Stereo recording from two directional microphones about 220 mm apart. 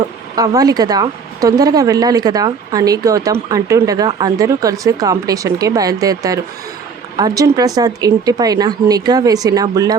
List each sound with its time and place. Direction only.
0.3 s speech: 15° right (ahead or behind)